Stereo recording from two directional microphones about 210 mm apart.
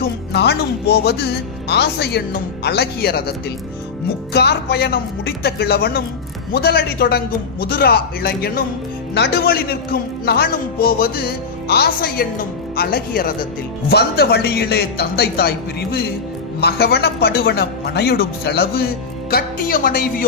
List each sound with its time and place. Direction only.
0.0 s a man's voice: 50° left (ahead or behind)